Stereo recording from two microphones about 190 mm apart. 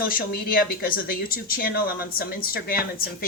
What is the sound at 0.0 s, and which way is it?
Speech, 50° left (ahead or behind).